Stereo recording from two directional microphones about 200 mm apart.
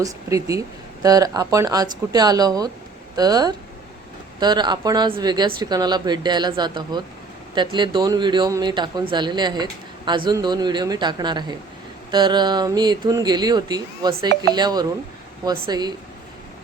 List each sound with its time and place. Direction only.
0.0 s speech: 15° right (ahead or behind)